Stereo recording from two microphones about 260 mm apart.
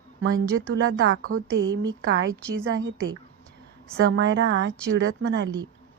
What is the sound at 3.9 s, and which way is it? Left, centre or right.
Speech, right.